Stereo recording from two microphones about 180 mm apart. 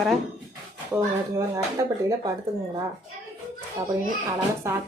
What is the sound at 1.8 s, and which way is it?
Speech, 20° right (ahead or behind).